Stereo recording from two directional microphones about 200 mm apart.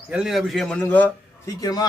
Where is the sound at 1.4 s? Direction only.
20° left (ahead or behind).